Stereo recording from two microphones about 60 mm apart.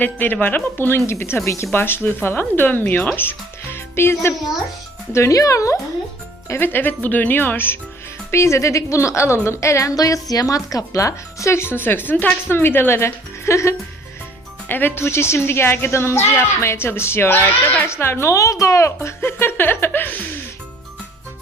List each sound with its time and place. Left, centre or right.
0.0 s speech: left
5.3 s speech: left
6.6 s speech: left
8.3 s speech: left
9.9 s a woman's voice: left
12.5 s a woman's voice: left
14.7 s a woman's voice: left
17.8 s a woman's voice: left